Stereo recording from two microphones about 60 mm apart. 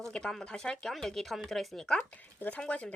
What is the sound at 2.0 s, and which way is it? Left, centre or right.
Speech, left.